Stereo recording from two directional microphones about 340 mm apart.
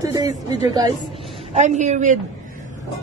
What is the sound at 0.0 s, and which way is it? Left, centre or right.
A man's voice, centre.